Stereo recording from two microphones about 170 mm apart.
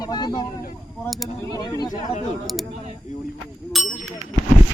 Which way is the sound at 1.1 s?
Centre (ahead or behind).